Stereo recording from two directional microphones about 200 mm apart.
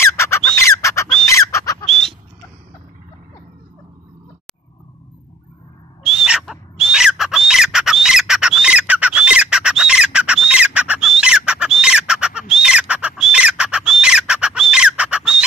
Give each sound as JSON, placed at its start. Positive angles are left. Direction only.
{"t": 0.0, "sound": "bird", "side_deg": 15}
{"t": 1.3, "sound": "chicken", "side_deg": 15}
{"t": 1.9, "sound": "a sound", "side_deg": 0}
{"t": 6.0, "sound": "bird", "side_deg": -5}